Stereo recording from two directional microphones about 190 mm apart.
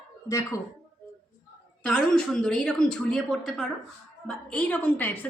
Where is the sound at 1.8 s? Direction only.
5° left (ahead or behind).